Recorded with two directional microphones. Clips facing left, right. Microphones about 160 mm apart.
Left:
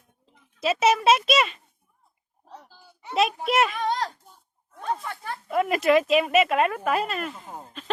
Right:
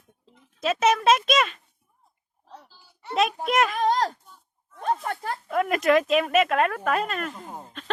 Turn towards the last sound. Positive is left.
turn(degrees=5)  # may be behind; listen again after turning